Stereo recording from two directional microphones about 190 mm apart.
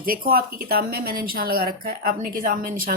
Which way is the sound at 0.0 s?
50° right (ahead or behind).